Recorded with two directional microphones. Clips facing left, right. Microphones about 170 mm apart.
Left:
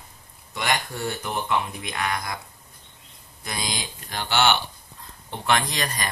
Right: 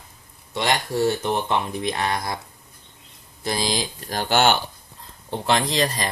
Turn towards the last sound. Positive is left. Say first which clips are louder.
# right 6 dB
turn(degrees=-25)  # may be behind; listen again after turning